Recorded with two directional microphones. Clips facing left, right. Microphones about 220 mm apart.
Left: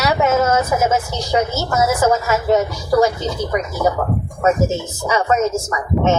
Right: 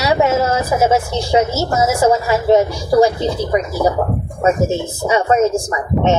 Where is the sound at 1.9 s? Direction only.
30° right (ahead or behind).